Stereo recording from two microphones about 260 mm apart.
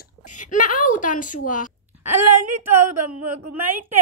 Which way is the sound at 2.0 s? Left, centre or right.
Right.